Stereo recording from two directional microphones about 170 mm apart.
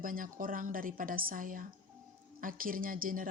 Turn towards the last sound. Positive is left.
turn(degrees=-55)  # may be behind; listen again after turning